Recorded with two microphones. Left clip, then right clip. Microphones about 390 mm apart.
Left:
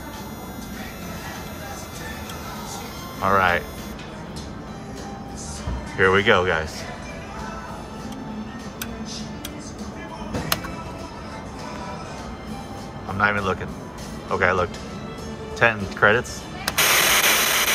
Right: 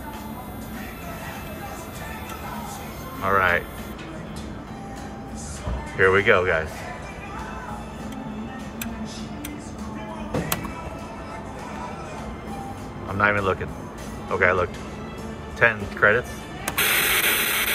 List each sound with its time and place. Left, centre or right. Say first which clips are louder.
3.3 s speech: left 1 dB; centre
5.9 s speech: even; centre
13.2 s speech: even; centre
15.6 s music: left 1 dB; centre